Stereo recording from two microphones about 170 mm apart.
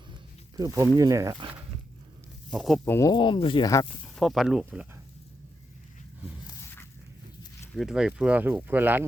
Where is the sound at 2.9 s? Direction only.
20° left (ahead or behind).